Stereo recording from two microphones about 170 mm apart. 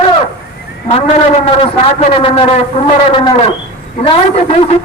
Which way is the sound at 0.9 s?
30° left (ahead or behind).